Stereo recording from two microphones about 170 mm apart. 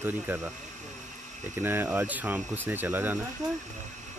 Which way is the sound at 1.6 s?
10° right (ahead or behind).